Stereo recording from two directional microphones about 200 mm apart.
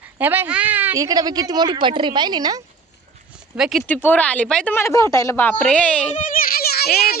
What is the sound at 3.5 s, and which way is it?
A woman's voice, 5° right (ahead or behind).